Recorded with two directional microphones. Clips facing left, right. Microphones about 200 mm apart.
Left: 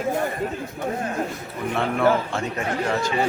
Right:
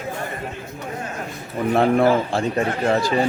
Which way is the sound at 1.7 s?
35° right (ahead or behind).